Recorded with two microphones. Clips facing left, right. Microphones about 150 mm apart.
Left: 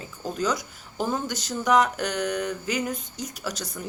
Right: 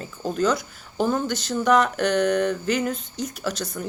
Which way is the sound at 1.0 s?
15° left (ahead or behind).